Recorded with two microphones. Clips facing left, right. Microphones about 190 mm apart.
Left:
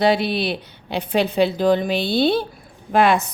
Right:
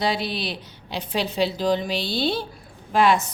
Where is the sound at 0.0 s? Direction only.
60° left (ahead or behind).